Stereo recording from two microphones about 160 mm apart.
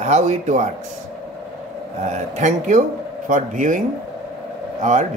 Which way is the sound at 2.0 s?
45° right (ahead or behind).